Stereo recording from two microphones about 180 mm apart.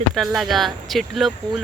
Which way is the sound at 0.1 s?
Centre (ahead or behind).